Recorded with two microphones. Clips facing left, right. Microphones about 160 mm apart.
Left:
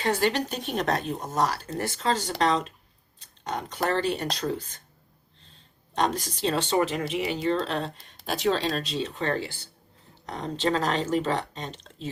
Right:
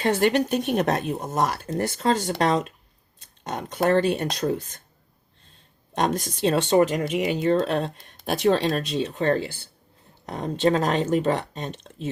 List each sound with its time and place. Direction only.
0.2 s speech: 55° right (ahead or behind)
3.2 s a sound: 50° right (ahead or behind)
3.8 s speech: 55° right (ahead or behind)
6.0 s speech: 55° right (ahead or behind)